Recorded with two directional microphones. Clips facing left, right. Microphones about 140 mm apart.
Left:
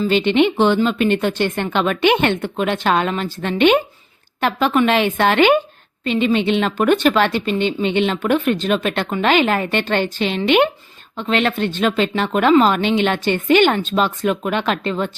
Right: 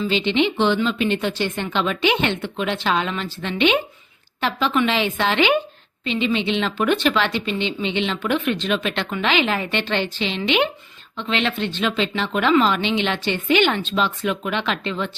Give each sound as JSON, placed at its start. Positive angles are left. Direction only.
{"t": 0.0, "sound": "speech", "side_deg": 50}